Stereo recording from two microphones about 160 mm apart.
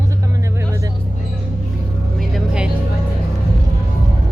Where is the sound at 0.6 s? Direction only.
20° right (ahead or behind).